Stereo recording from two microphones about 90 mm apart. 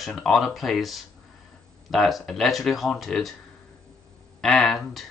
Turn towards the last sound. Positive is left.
turn(degrees=0)  # may be behind; listen again after turning